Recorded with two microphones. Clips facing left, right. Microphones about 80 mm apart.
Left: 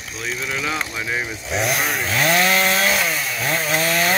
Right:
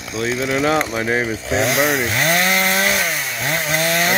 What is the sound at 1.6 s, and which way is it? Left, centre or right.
Chainsaw, right.